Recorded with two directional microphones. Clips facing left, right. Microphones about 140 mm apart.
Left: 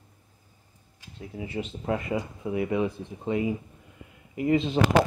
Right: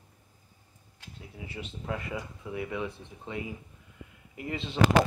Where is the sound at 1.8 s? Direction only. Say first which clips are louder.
Left 7 dB; 35° left (ahead or behind).